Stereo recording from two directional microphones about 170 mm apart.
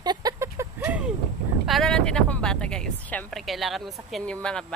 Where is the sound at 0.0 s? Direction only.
25° right (ahead or behind).